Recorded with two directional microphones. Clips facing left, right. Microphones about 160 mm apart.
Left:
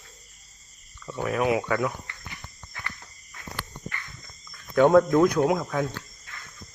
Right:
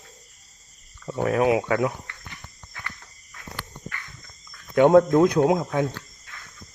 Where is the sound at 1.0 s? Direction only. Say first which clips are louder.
Right 4 dB; 35° right (ahead or behind).